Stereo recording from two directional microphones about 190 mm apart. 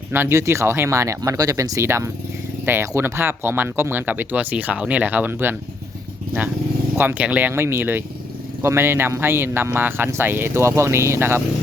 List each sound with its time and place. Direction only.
0.1 s speech: 10° right (ahead or behind)
6.9 s speech: 10° right (ahead or behind)